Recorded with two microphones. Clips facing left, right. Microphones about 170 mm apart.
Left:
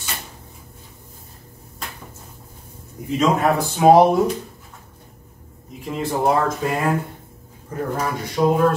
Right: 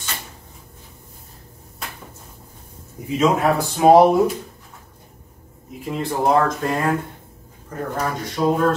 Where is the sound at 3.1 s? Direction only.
Centre (ahead or behind).